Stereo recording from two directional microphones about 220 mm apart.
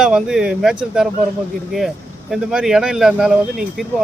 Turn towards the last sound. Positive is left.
turn(degrees=0)  # may be behind; listen again after turning